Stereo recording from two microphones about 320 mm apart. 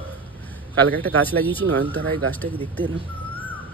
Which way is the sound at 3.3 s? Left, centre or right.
Centre.